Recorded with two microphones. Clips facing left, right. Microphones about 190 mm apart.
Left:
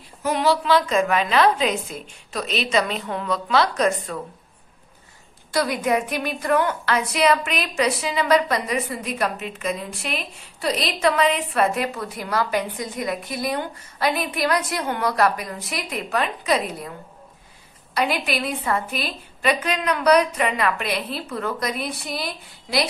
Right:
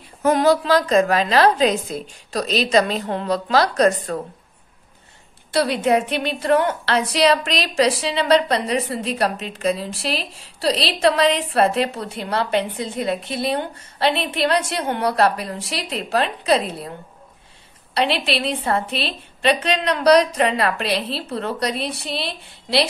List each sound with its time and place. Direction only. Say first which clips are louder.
0.2 s a woman's voice: right 5 dB; 45° right (ahead or behind)
5.5 s a woman's voice: right 3 dB; 30° right (ahead or behind)
17.9 s a woman's voice: right 2 dB; 30° right (ahead or behind)